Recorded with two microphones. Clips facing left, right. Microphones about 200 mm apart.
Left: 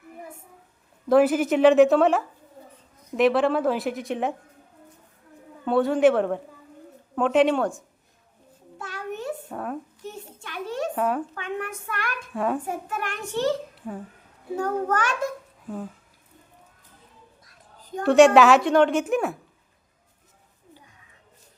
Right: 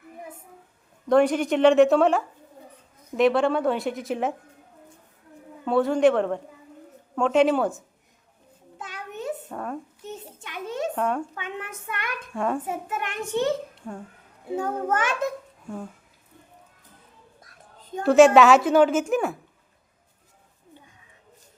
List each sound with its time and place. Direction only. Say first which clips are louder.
1.0 s a woman's voice: left 1 dB; 5° left (ahead or behind)
5.6 s a woman's voice: even; centre (ahead or behind)
8.8 s a sound: left 2 dB; 20° right (ahead or behind)
9.5 s a child's voice: left 1 dB; centre (ahead or behind)
10.1 s a sound: right 1 dB; 20° right (ahead or behind)
10.9 s speech: left 2 dB; 5° left (ahead or behind)
11.3 s a child's voice: left 4 dB; 20° right (ahead or behind)
12.3 s a woman's voice: left 1 dB; centre (ahead or behind)
12.6 s a child's voice: even; 20° right (ahead or behind)
13.7 s babbling: left 2 dB; 5° left (ahead or behind)
14.5 s a child's voice: left 1 dB; 20° right (ahead or behind)
15.6 s speech: left 2 dB; 5° left (ahead or behind)
18.0 s a woman's voice: even; centre (ahead or behind)